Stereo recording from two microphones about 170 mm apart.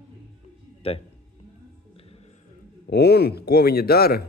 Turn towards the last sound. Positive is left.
turn(degrees=65)  # may be behind; listen again after turning